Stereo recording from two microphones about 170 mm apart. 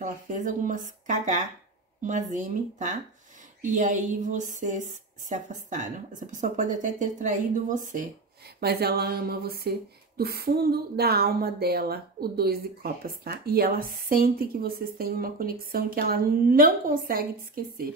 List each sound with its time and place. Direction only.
0.0 s a woman's voice: 50° right (ahead or behind)
8.5 s speech: 70° right (ahead or behind)